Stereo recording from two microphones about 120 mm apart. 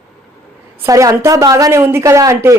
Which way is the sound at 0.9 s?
25° right (ahead or behind).